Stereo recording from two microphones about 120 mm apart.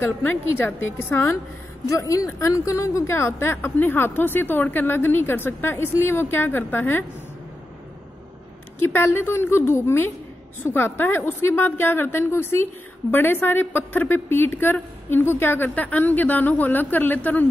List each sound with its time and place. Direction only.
0.0 s a woman's voice: 15° left (ahead or behind)
8.7 s a woman's voice: 20° left (ahead or behind)